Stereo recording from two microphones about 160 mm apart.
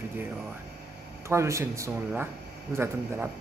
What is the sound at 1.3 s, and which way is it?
Speech, 20° right (ahead or behind).